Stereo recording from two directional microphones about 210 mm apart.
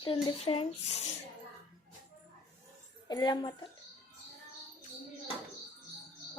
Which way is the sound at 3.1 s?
20° left (ahead or behind).